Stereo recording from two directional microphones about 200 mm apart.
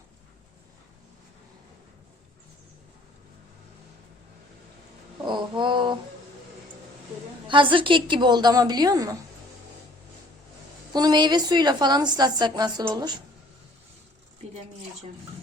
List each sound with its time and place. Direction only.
5.2 s a sound: 25° right (ahead or behind)
7.4 s a woman's voice: 25° right (ahead or behind)
10.9 s a woman's voice: 20° right (ahead or behind)